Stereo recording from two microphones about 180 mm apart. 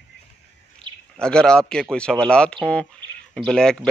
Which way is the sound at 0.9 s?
25° right (ahead or behind).